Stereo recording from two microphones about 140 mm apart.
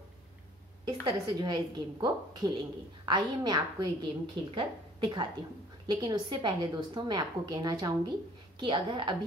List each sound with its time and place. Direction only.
0.8 s a woman's voice: 35° right (ahead or behind)